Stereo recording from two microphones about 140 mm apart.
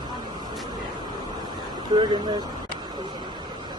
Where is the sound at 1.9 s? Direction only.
35° right (ahead or behind).